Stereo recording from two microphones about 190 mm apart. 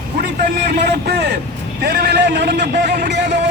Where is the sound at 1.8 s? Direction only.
60° right (ahead or behind).